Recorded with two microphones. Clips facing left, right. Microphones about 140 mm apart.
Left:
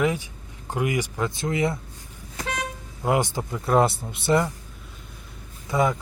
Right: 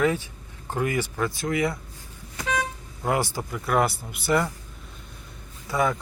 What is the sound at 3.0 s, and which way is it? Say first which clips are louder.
Speech: left 2 dB; 20° left (ahead or behind).